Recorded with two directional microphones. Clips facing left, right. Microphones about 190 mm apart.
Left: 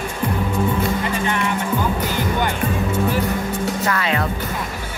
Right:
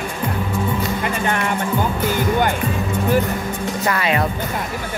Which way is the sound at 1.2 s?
45° right (ahead or behind).